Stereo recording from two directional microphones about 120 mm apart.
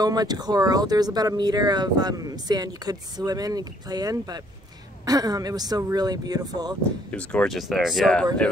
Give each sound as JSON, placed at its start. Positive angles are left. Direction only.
{"t": 0.0, "sound": "speech", "side_deg": -35}
{"t": 7.1, "sound": "speech", "side_deg": 10}
{"t": 7.5, "sound": "speech", "side_deg": 0}